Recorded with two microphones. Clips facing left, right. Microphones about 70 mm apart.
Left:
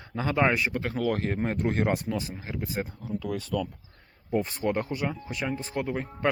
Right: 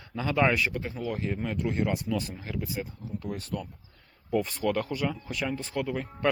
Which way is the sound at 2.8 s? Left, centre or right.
Left.